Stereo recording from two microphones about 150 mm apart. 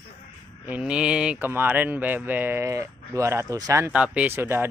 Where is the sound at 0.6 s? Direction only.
10° right (ahead or behind).